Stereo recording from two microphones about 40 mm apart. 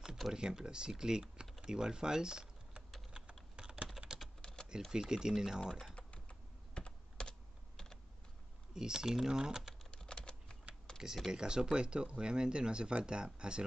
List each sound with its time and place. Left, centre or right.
0.3 s speech: centre
3.1 s typing: right
4.4 s typing: left
4.9 s speech: centre
5.7 s speech: centre
5.9 s typing: left
7.2 s computer keyboard: centre
8.7 s speech: centre
9.9 s typing: left
11.3 s speech: centre